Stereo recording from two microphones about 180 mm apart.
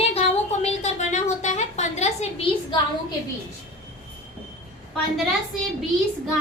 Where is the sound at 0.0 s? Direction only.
35° left (ahead or behind).